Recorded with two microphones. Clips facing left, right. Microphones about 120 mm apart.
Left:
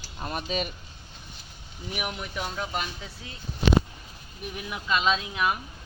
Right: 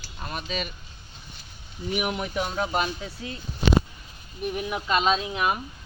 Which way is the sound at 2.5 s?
40° right (ahead or behind).